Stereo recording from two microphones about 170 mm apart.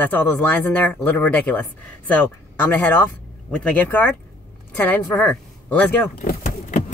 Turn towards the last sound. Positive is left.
turn(degrees=45)  # may be behind; listen again after turning